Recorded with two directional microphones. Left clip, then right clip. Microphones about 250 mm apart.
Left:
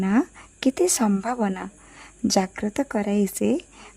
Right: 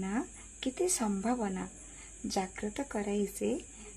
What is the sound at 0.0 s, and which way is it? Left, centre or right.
A woman's voice, left.